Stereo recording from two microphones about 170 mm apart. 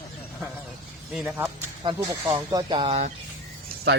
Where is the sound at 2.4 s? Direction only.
25° right (ahead or behind).